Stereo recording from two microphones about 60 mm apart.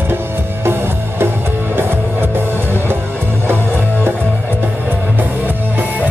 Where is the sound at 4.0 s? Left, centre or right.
Right.